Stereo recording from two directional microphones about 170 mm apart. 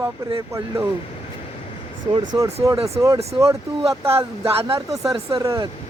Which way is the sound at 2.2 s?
20° right (ahead or behind).